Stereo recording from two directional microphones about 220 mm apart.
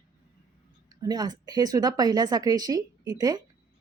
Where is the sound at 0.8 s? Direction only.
15° right (ahead or behind).